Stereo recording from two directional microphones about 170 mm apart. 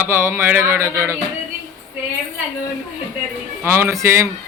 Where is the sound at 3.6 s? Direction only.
15° right (ahead or behind).